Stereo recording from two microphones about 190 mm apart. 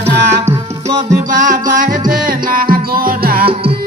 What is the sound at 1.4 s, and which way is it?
Music, 45° right (ahead or behind).